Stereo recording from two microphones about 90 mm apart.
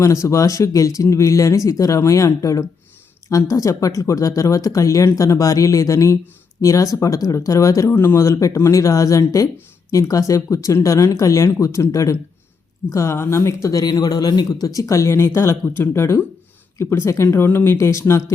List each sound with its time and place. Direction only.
0.0 s speech: 35° left (ahead or behind)